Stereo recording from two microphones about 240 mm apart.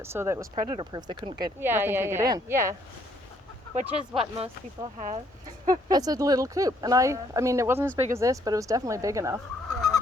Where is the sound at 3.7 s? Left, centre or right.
Right.